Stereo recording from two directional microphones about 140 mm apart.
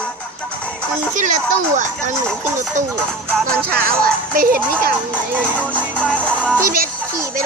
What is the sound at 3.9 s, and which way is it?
Speech, 90° right.